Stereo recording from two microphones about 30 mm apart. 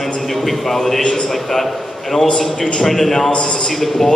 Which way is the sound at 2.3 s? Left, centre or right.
Left.